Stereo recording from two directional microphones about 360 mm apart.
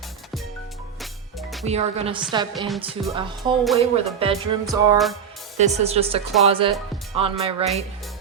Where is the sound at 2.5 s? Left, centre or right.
Centre.